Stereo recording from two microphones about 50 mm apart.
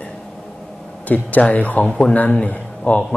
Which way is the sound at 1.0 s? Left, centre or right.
Left.